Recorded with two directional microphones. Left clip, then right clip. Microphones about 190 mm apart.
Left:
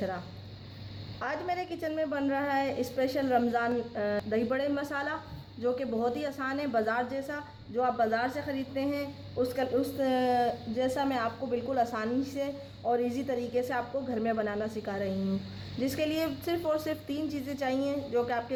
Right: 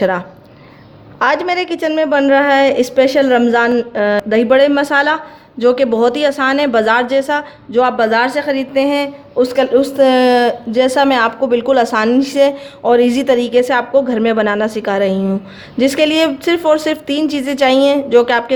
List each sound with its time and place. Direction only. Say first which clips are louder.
1.2 s a woman's voice: right 19 dB; 40° right (ahead or behind)